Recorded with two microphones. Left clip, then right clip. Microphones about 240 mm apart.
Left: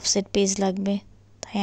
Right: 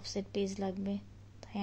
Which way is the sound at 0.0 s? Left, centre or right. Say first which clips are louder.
Left 14 dB; left.